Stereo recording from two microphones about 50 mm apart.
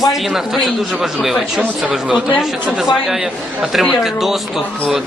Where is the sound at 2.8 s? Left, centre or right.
Centre.